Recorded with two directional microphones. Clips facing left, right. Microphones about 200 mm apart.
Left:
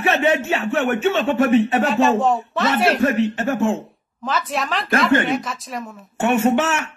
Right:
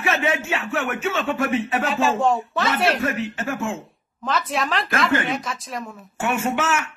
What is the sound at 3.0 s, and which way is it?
Speech, 35° left (ahead or behind).